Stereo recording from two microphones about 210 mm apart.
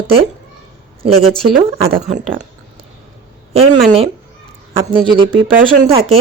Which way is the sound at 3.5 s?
30° right (ahead or behind).